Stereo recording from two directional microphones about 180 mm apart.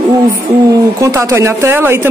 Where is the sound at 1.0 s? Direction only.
15° right (ahead or behind).